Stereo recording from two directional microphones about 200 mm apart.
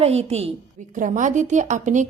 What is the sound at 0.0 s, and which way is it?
Speech, 30° right (ahead or behind).